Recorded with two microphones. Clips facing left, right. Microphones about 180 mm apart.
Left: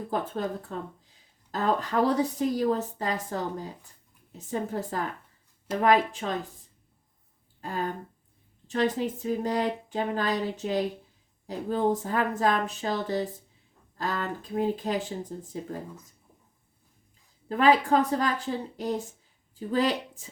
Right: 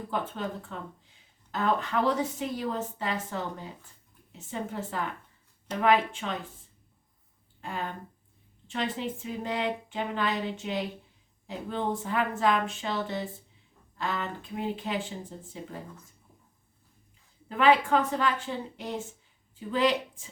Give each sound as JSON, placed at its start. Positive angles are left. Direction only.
{"t": 0.1, "sound": "speech", "side_deg": 40}
{"t": 7.6, "sound": "speech", "side_deg": 40}
{"t": 17.5, "sound": "speech", "side_deg": 40}